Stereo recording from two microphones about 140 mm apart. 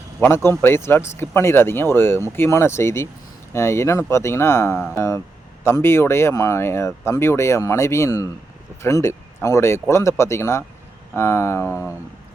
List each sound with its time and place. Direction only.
0.2 s a man's voice: 15° left (ahead or behind)